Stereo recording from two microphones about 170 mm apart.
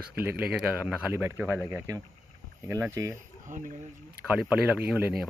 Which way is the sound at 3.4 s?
50° right (ahead or behind).